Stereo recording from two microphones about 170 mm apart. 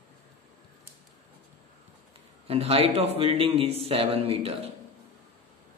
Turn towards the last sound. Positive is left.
turn(degrees=-35)  # may be behind; listen again after turning